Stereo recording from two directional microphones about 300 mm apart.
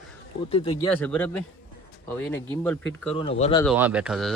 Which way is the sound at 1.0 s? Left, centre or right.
Centre.